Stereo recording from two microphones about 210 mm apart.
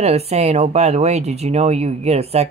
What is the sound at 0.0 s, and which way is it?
Speech, 30° right (ahead or behind).